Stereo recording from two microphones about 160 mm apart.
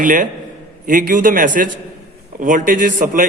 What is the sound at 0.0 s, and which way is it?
A man's voice, 55° right (ahead or behind).